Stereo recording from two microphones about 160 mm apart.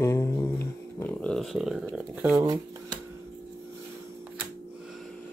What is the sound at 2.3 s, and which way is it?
Speech, 25° right (ahead or behind).